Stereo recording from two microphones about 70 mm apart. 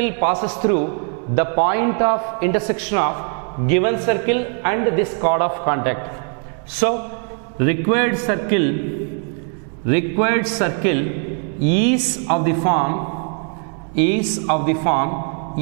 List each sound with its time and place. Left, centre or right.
0.0 s a man's voice: centre
9.8 s a man's voice: centre